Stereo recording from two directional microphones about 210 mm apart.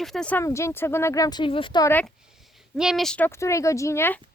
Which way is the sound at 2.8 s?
Centre (ahead or behind).